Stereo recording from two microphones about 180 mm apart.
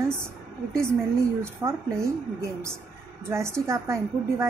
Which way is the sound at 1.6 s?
15° right (ahead or behind).